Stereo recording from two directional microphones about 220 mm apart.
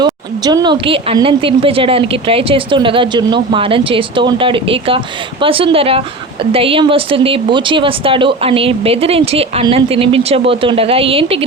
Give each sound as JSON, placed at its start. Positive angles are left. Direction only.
{"t": 0.0, "sound": "a woman's voice", "side_deg": -20}